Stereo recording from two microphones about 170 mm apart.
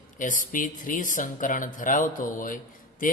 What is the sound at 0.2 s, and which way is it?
Speech, 50° left (ahead or behind).